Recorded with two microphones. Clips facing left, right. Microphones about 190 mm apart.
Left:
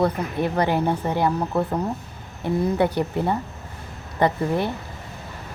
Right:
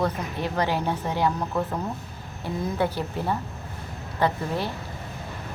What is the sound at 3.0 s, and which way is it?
Speech, 15° left (ahead or behind).